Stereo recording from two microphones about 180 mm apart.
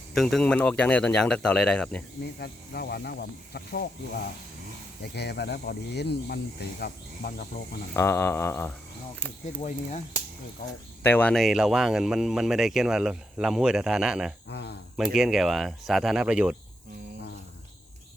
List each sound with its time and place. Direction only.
0.1 s speech: centre (ahead or behind)
2.4 s speech: 60° left (ahead or behind)
5.1 s speech: 65° left (ahead or behind)
7.9 s a sound: 15° left (ahead or behind)
9.6 s speech: 40° left (ahead or behind)
11.0 s speech: 10° left (ahead or behind)
14.5 s speech: 65° left (ahead or behind)
14.9 s speech: centre (ahead or behind)